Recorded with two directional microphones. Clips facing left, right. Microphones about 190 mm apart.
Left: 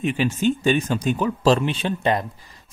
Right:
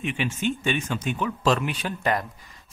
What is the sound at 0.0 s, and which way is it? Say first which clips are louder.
Speech: left 6 dB; 35° left (ahead or behind).